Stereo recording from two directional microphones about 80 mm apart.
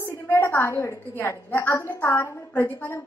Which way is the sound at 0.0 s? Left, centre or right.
Left.